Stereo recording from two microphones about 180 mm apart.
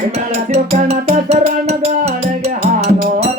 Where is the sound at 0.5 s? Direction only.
35° right (ahead or behind).